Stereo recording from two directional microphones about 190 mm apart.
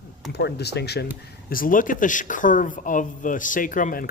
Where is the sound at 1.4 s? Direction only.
50° left (ahead or behind).